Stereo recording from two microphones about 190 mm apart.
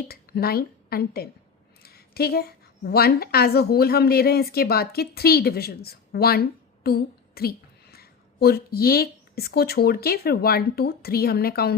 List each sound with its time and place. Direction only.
0.0 s a woman's voice: 55° left (ahead or behind)